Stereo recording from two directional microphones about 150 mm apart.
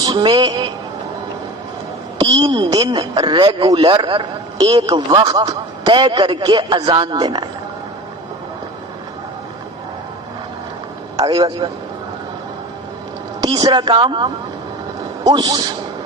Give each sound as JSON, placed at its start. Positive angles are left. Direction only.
{"t": 0.0, "sound": "a woman's voice", "side_deg": -30}
{"t": 2.3, "sound": "a woman's voice", "side_deg": -25}
{"t": 11.2, "sound": "a woman's voice", "side_deg": -30}
{"t": 13.4, "sound": "a man's voice", "side_deg": -30}